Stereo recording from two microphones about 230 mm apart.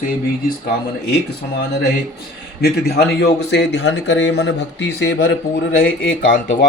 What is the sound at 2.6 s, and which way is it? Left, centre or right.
Speech, left.